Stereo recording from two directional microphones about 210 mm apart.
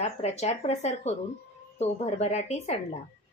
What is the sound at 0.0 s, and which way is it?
Speech, 30° left (ahead or behind).